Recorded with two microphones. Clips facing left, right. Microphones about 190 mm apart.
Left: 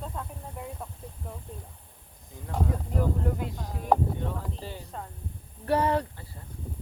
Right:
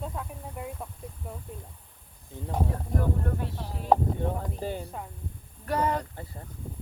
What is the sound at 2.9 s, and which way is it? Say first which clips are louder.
Speech: even; 10° left (ahead or behind).